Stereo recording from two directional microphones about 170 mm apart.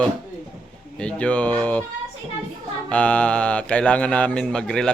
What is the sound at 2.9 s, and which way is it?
Speech, 5° left (ahead or behind).